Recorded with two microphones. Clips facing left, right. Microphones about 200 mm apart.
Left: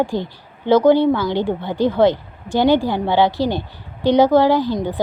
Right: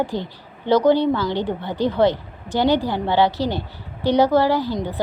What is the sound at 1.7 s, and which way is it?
Speech, 15° right (ahead or behind).